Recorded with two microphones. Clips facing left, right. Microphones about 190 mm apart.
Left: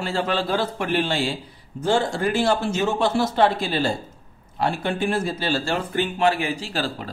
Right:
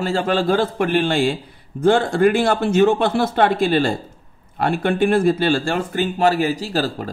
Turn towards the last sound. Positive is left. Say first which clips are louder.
# right 5 dB
turn(degrees=-45)  # may be behind; listen again after turning